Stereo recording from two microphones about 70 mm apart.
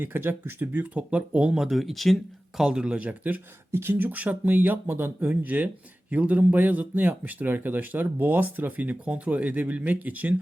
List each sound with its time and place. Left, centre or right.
0.0 s speech: right; by 2.1 s centre
2.6 s speech: centre
3.7 s speech: right